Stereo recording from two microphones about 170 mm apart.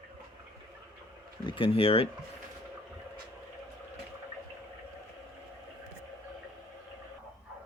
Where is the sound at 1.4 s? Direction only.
30° left (ahead or behind).